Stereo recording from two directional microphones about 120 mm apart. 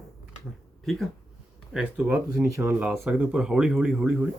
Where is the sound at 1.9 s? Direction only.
10° right (ahead or behind).